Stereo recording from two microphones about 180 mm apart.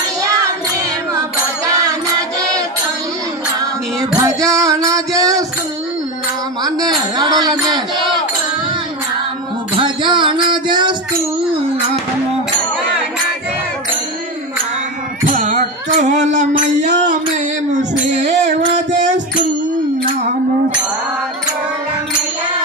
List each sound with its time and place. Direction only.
4.2 s music: 20° right (ahead or behind)
7.2 s a sound: 25° right (ahead or behind)
9.8 s music: 25° right (ahead or behind)
15.2 s music: 40° right (ahead or behind)
17.7 s female singing: 40° right (ahead or behind)